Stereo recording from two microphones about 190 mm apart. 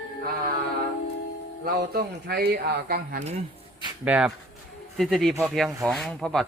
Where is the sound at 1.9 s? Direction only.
55° right (ahead or behind).